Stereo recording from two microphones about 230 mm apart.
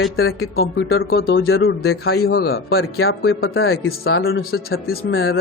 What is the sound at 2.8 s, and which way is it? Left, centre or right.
Speech, left.